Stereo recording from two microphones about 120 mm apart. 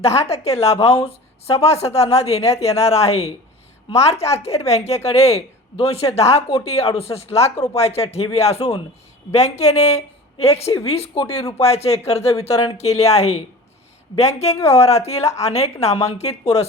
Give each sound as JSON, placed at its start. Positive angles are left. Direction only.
{"t": 0.0, "sound": "speech", "side_deg": 60}